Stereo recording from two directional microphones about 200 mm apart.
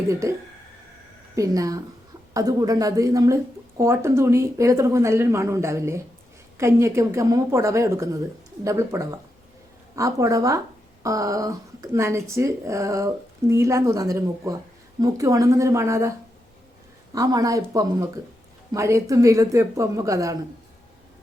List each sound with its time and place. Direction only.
0.1 s a woman's voice: 15° right (ahead or behind)
1.4 s a woman's voice: 15° right (ahead or behind)
17.2 s a woman's voice: 15° right (ahead or behind)